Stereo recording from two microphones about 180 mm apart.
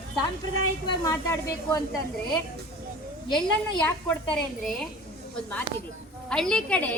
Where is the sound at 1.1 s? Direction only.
15° left (ahead or behind).